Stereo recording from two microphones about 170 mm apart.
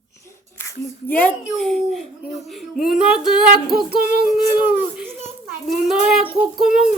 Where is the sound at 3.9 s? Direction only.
65° right (ahead or behind).